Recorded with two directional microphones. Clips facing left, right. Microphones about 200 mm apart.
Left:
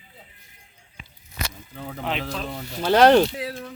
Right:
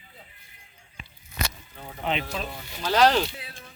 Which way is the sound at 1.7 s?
65° left (ahead or behind).